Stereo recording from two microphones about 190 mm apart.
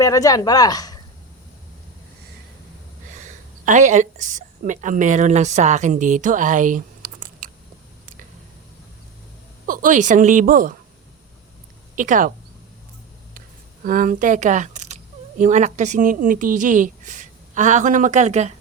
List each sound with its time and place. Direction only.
0.0 s speech: 15° left (ahead or behind)
3.2 s a woman's voice: 40° right (ahead or behind)
9.6 s speech: 45° right (ahead or behind)
11.9 s speech: 45° right (ahead or behind)
13.8 s a woman's voice: 45° right (ahead or behind)